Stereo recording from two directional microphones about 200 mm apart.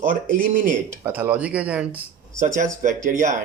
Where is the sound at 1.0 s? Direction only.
10° right (ahead or behind).